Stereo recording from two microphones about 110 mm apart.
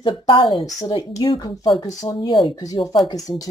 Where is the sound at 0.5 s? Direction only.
35° left (ahead or behind).